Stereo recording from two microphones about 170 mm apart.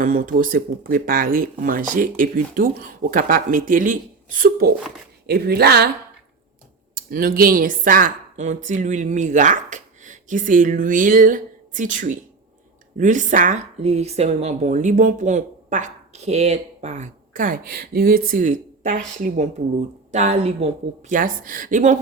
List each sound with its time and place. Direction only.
0.0 s speech: 50° right (ahead or behind)
5.2 s speech: 70° right (ahead or behind)
6.9 s speech: 60° right (ahead or behind); by 20.7 s 40° right (ahead or behind)
21.1 s speech: 50° right (ahead or behind)